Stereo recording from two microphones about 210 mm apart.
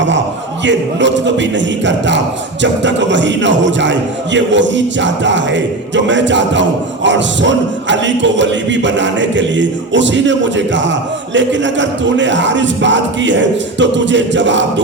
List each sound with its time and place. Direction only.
0.6 s a man's voice: 60° right (ahead or behind)